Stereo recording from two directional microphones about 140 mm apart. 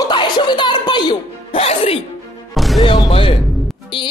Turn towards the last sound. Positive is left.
turn(degrees=35)  # may be behind; listen again after turning